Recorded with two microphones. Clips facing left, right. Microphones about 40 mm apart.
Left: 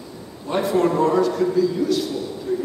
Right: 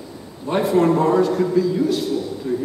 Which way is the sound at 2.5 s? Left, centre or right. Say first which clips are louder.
Even; right.